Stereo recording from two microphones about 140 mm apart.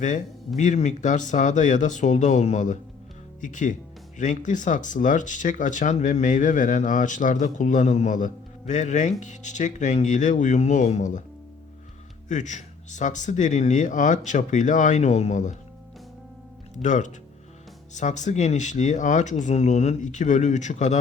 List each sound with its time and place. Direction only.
0.0 s speech: 60° left (ahead or behind)
12.3 s speech: 60° left (ahead or behind)
16.8 s speech: 60° left (ahead or behind)